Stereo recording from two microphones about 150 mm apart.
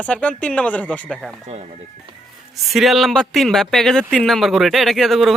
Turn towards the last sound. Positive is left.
turn(degrees=0)  # may be behind; listen again after turning